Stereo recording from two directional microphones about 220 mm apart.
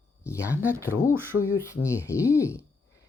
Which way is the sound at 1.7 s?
10° left (ahead or behind).